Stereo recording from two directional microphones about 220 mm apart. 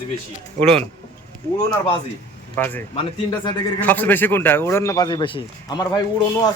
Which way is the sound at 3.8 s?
5° left (ahead or behind).